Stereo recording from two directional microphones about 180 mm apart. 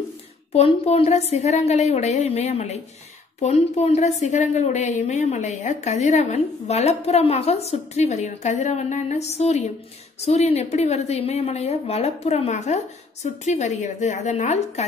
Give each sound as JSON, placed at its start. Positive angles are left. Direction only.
{"t": 0.5, "sound": "a woman's voice", "side_deg": 35}